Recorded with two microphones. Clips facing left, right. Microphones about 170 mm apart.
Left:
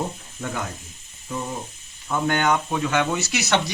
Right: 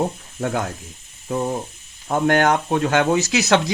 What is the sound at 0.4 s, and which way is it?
Speech, 60° right (ahead or behind).